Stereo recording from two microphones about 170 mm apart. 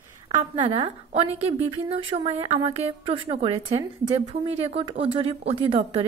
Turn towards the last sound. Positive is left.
turn(degrees=-30)  # may be behind; listen again after turning